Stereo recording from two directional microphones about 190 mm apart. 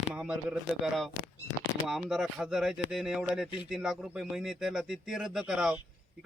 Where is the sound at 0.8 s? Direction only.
Centre (ahead or behind).